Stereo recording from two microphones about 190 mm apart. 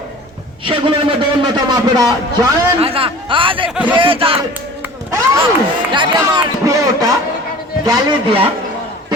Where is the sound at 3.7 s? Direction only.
10° right (ahead or behind).